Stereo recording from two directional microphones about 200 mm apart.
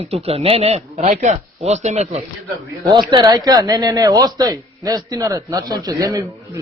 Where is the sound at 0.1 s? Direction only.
30° right (ahead or behind).